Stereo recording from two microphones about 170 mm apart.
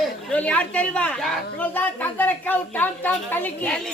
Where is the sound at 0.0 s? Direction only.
5° left (ahead or behind).